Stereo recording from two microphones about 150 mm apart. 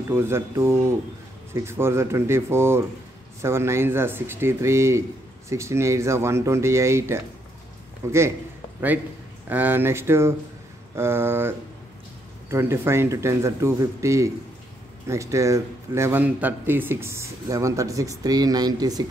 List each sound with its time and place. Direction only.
0.1 s a man's voice: 15° right (ahead or behind)
9.5 s a man's voice: 10° right (ahead or behind)